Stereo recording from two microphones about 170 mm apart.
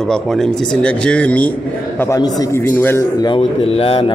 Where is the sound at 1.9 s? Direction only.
20° left (ahead or behind).